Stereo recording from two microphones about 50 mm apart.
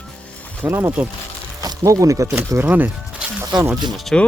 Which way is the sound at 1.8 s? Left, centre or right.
Right.